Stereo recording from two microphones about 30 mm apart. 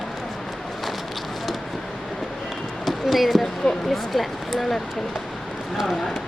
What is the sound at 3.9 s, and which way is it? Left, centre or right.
Speech, centre.